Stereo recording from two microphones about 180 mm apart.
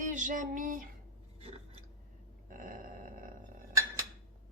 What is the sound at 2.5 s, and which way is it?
Dog, 50° right (ahead or behind).